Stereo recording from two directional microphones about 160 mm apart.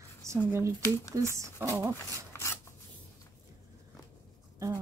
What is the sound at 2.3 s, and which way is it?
Filing, 15° left (ahead or behind).